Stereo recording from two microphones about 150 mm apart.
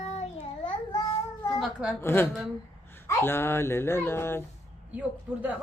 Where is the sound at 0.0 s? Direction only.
40° left (ahead or behind).